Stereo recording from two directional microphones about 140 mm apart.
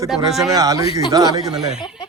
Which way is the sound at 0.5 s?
25° right (ahead or behind).